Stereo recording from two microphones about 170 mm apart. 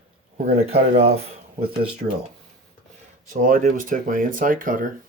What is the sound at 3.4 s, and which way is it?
Speech, 50° right (ahead or behind).